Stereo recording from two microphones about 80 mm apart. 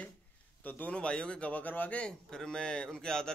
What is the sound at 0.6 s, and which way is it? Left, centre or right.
A man's voice, left.